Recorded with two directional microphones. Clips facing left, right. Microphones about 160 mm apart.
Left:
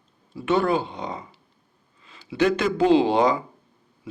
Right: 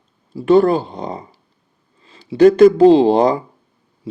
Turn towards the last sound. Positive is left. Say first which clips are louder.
# right 6 dB
turn(degrees=-45)  # may be behind; listen again after turning